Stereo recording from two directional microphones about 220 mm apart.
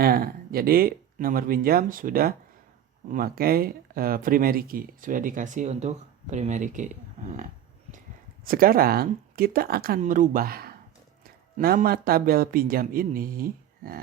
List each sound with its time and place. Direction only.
0.0 s speech: 45° right (ahead or behind)
8.4 s speech: 40° right (ahead or behind)